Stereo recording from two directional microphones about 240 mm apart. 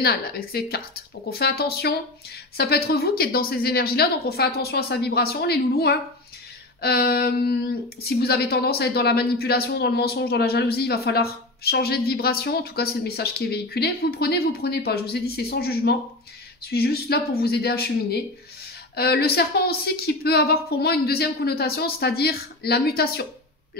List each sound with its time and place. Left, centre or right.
0.0 s speech: left